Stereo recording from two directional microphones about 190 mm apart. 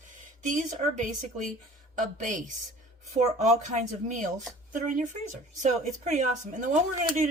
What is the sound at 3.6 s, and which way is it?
A woman's voice, 40° right (ahead or behind).